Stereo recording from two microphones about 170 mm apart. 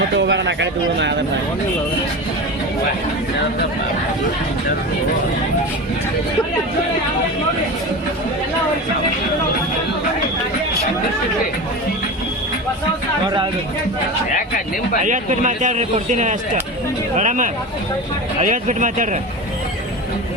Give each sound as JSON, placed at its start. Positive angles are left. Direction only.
{"t": 0.2, "sound": "speech", "side_deg": -90}
{"t": 15.0, "sound": "a man's voice", "side_deg": -45}